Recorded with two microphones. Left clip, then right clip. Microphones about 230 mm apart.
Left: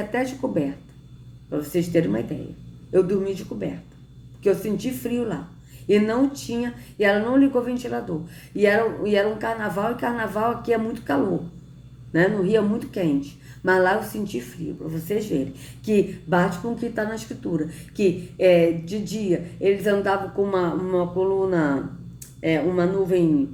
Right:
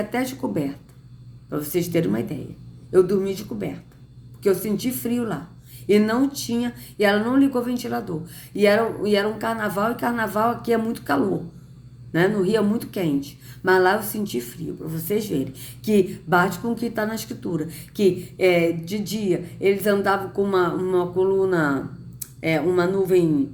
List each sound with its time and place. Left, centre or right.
0.1 s speech: right